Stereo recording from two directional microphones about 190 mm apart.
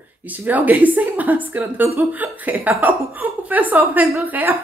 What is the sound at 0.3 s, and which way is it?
A woman's voice, 10° right (ahead or behind).